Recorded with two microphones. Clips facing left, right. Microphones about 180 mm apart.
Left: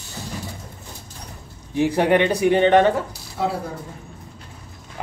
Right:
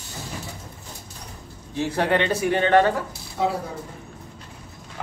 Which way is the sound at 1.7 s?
15° left (ahead or behind).